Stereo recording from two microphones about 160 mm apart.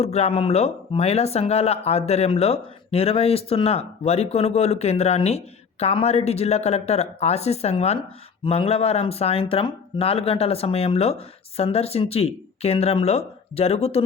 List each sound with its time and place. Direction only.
0.0 s speech: 40° left (ahead or behind)